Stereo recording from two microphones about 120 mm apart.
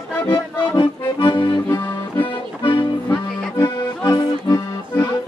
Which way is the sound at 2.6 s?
45° left (ahead or behind).